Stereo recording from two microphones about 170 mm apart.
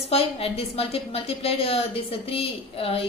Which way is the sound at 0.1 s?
35° left (ahead or behind).